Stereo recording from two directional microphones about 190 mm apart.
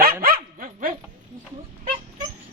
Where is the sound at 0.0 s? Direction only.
50° right (ahead or behind).